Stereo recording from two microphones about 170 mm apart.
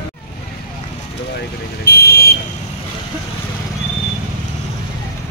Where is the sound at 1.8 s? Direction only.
70° left (ahead or behind).